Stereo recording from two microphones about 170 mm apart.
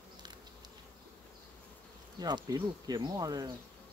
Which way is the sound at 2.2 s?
20° right (ahead or behind).